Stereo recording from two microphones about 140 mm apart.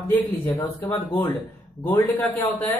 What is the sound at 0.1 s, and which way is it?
Speech, 15° left (ahead or behind).